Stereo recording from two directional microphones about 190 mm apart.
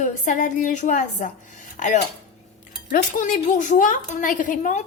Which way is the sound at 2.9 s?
45° left (ahead or behind).